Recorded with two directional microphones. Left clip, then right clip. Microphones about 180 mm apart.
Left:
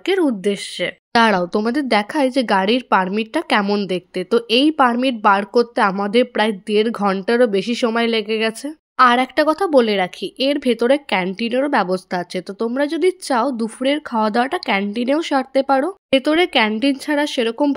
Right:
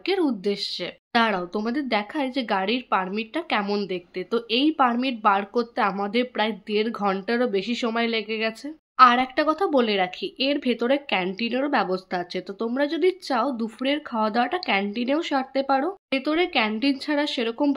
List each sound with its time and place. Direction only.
0.0 s speech: 35° left (ahead or behind)
16.7 s speech: 30° left (ahead or behind)